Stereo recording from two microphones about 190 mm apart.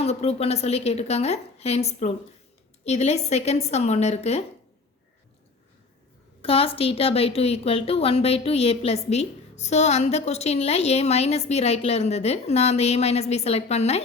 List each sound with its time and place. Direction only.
0.0 s a woman's voice: 35° left (ahead or behind)
6.4 s a woman's voice: 30° left (ahead or behind)